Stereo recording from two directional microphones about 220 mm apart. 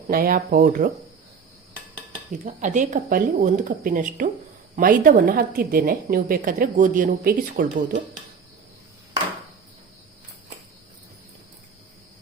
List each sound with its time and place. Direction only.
0.1 s a woman's voice: 40° right (ahead or behind)
2.3 s a woman's voice: 35° right (ahead or behind)